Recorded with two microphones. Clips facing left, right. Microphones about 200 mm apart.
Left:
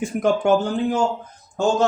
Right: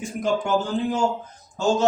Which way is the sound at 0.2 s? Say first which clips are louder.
Left 5 dB; 60° left (ahead or behind).